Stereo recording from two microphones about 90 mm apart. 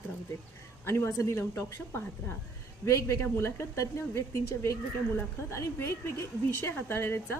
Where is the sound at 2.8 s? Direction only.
35° left (ahead or behind).